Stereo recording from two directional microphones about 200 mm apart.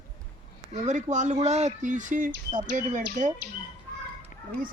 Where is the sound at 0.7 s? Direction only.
35° right (ahead or behind).